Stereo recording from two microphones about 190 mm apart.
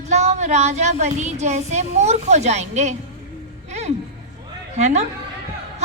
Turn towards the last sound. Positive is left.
turn(degrees=-35)  # may be behind; listen again after turning